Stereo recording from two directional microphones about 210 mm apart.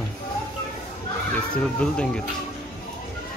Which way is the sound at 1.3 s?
5° left (ahead or behind).